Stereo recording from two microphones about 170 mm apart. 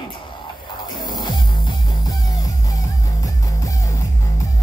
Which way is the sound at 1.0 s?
25° left (ahead or behind).